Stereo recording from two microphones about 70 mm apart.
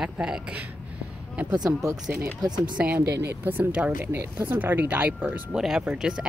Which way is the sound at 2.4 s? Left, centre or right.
Right.